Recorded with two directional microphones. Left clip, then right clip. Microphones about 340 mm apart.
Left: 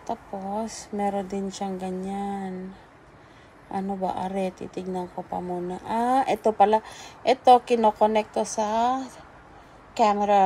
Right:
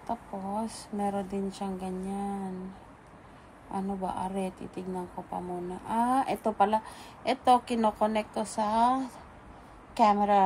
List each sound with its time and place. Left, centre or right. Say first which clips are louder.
0.1 s speech: left 4 dB; centre
3.7 s speech: left 5 dB; centre